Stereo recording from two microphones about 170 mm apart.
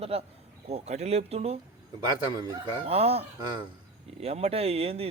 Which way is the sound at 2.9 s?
35° right (ahead or behind).